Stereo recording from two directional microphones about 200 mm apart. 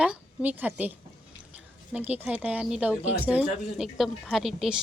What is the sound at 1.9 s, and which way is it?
A woman's voice, 5° right (ahead or behind).